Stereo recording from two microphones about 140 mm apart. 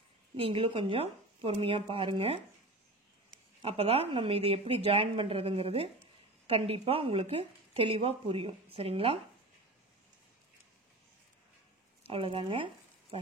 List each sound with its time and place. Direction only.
0.4 s speech: 40° right (ahead or behind)
3.6 s a woman's voice: 45° right (ahead or behind)
12.1 s speech: 40° right (ahead or behind)